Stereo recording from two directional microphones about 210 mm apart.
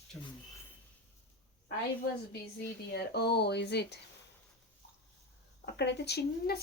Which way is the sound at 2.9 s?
50° left (ahead or behind).